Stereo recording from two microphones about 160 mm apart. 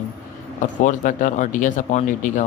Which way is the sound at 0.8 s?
55° left (ahead or behind).